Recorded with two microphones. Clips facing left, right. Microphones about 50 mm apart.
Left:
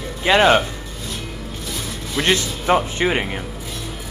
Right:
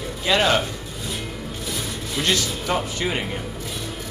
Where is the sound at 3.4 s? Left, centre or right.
Centre.